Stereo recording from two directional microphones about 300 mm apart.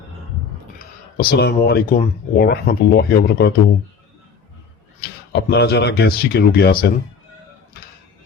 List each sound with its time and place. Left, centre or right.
0.8 s speech: left
5.3 s speech: left